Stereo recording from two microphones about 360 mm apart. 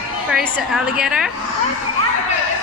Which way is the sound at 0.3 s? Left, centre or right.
Centre.